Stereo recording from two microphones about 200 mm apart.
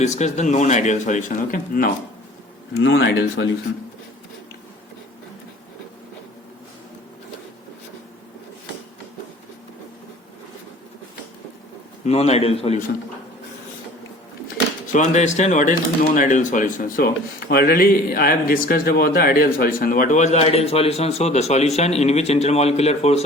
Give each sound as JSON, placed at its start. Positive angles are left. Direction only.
{"t": 0.0, "sound": "speech", "side_deg": 35}
{"t": 2.7, "sound": "speech", "side_deg": 60}
{"t": 12.0, "sound": "speech", "side_deg": 30}
{"t": 14.9, "sound": "speech", "side_deg": 35}